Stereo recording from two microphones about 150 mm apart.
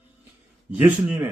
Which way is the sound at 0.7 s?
10° right (ahead or behind).